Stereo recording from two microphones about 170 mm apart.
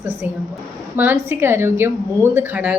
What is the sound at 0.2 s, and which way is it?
A woman's voice, 10° right (ahead or behind).